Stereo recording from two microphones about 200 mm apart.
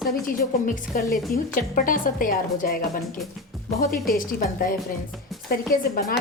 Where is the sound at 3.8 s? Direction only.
45° left (ahead or behind).